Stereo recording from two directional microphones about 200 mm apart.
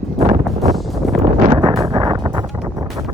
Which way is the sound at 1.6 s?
20° right (ahead or behind).